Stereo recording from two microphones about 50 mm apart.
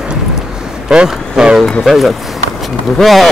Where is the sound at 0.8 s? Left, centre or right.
Centre.